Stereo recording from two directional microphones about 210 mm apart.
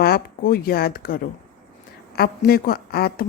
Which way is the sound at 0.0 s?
45° left (ahead or behind).